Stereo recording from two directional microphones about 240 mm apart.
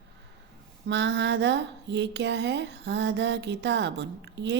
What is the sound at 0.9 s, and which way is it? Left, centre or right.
Speech, right.